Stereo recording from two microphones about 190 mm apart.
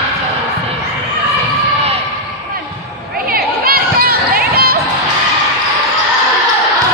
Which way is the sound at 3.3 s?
50° right (ahead or behind).